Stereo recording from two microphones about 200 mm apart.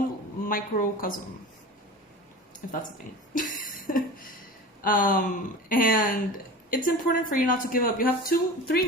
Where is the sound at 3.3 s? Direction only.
40° left (ahead or behind).